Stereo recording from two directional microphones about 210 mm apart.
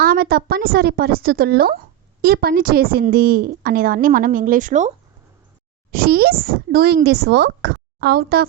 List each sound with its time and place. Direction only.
0.0 s a woman's voice: 45° right (ahead or behind)
5.9 s a woman's voice: 45° right (ahead or behind)